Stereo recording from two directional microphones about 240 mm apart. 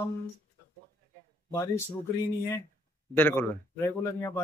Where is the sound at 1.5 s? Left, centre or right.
Centre.